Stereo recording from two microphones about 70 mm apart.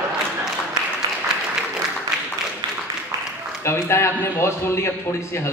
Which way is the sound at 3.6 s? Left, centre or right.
Left.